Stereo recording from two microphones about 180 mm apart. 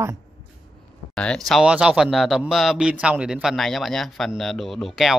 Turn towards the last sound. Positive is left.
turn(degrees=0)  # may be behind; listen again after turning